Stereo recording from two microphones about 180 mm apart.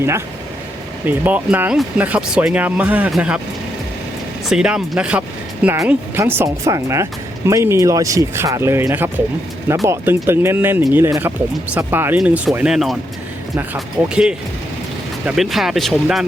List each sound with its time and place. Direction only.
1.0 s speech: 10° right (ahead or behind)
4.4 s speech: 5° right (ahead or behind)
15.4 s speech: centre (ahead or behind)